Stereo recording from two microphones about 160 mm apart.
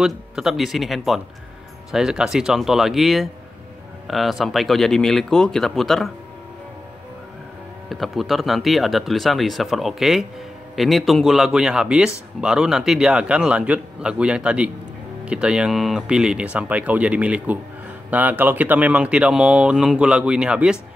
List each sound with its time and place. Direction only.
0.0 s speech: 5° right (ahead or behind)
7.9 s speech: centre (ahead or behind)